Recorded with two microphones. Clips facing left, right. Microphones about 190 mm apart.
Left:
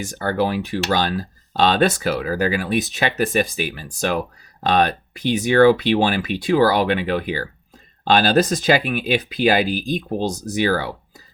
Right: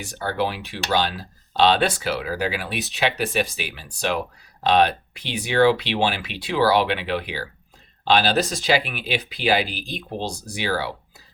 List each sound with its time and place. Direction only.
0.2 s speech: 45° left (ahead or behind)